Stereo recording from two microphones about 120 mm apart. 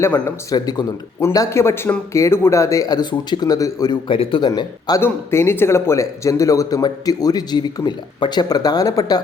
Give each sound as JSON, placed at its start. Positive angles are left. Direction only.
{"t": 0.0, "sound": "speech", "side_deg": 20}
{"t": 0.5, "sound": "a man's voice", "side_deg": 35}
{"t": 4.1, "sound": "a man's voice", "side_deg": 45}
{"t": 4.9, "sound": "a man's voice", "side_deg": 20}